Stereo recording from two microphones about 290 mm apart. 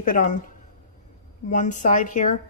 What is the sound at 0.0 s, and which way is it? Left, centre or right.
Speech, left.